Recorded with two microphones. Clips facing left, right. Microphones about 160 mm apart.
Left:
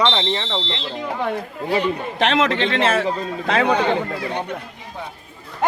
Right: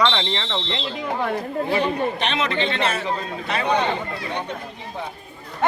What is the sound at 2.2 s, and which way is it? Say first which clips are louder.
A man's voice: left 5 dB; 90° left.